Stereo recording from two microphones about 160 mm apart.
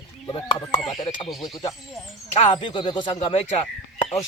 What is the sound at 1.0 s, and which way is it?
Speech, 40° left (ahead or behind).